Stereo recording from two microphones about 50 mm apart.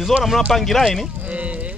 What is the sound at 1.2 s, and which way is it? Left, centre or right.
Livestock, right.